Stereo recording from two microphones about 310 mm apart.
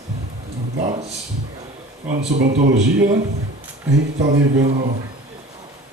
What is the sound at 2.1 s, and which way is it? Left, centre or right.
Speech, right.